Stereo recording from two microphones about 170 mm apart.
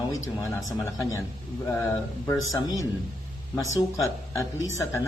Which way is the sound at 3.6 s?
20° left (ahead or behind).